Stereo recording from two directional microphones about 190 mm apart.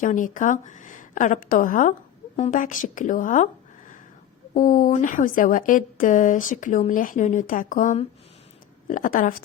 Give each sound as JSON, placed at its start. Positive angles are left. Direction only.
{"t": 0.0, "sound": "a woman's voice", "side_deg": 40}